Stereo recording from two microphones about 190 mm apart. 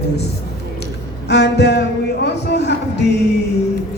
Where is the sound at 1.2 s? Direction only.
65° left (ahead or behind).